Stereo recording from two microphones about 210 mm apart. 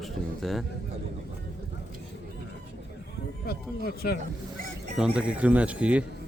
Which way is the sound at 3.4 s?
45° left (ahead or behind).